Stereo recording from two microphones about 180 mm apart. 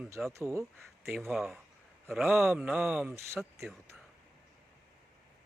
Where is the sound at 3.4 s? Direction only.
Centre (ahead or behind).